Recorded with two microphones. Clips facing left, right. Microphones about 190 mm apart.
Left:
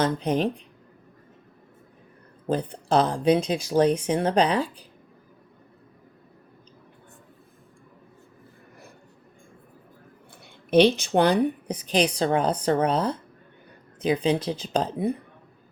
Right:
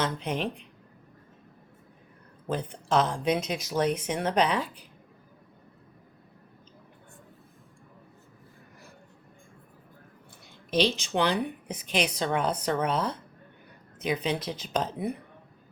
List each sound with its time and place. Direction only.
0.0 s a woman's voice: 35° left (ahead or behind)
2.5 s a woman's voice: 35° left (ahead or behind)
10.7 s a woman's voice: 55° left (ahead or behind); by 15.1 s 30° left (ahead or behind)